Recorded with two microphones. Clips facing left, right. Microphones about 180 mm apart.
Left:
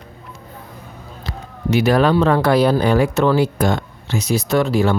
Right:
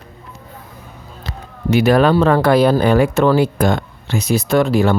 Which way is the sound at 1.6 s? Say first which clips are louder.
Right 2 dB; 55° right (ahead or behind).